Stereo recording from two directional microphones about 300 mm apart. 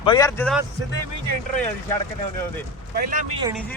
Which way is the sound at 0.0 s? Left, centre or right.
Centre.